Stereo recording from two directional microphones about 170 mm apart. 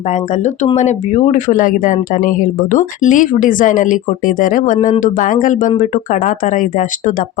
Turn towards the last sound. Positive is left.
turn(degrees=50)  # may be behind; listen again after turning